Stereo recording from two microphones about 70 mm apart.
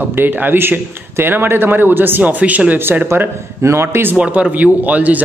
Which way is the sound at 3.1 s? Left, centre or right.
Right.